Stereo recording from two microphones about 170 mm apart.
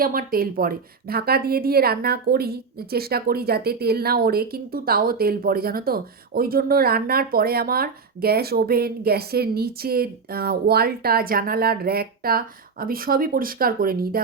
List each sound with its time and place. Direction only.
0.0 s a woman's voice: 60° right (ahead or behind)